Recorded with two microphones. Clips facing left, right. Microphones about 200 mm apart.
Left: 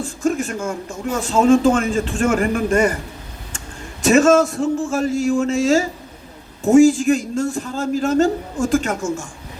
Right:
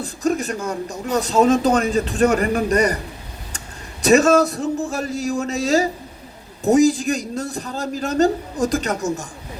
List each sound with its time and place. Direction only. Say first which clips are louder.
0.0 s speech: left 1 dB; 35° right (ahead or behind)
4.0 s speech: left 1 dB; 35° right (ahead or behind)